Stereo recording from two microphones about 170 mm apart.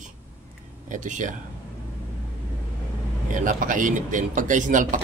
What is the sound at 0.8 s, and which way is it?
Speech, 50° right (ahead or behind).